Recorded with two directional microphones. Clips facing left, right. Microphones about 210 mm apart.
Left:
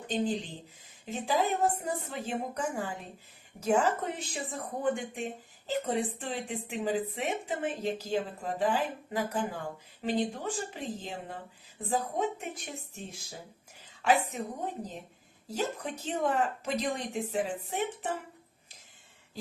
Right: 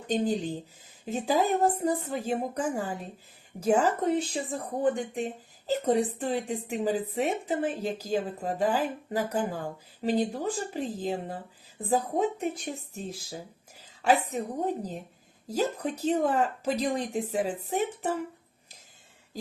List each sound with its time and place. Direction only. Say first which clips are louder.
0.1 s speech: right 4 dB; 40° right (ahead or behind)
14.0 s speech: right 3 dB; 35° right (ahead or behind)
15.4 s speech: right 5 dB; 40° right (ahead or behind)